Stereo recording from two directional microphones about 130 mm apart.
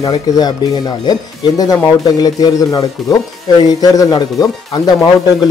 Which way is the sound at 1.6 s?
30° left (ahead or behind).